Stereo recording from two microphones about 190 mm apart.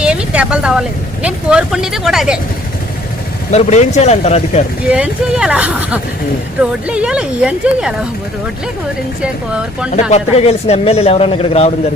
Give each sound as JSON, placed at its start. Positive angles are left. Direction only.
{"t": 0.0, "sound": "speech", "side_deg": -5}
{"t": 3.5, "sound": "speech", "side_deg": 35}
{"t": 4.8, "sound": "speech", "side_deg": -5}
{"t": 9.5, "sound": "speech", "side_deg": -5}
{"t": 9.9, "sound": "speech", "side_deg": 35}